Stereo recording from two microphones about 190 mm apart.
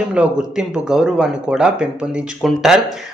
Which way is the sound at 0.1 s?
5° right (ahead or behind).